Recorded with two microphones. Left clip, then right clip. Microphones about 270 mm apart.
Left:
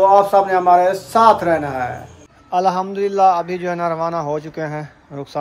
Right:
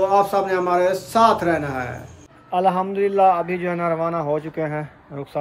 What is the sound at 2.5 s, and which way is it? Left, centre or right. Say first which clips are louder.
A man's voice: left 2 dB; centre.